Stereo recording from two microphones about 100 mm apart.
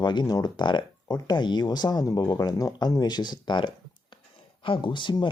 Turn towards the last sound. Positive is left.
turn(degrees=50)  # may be behind; listen again after turning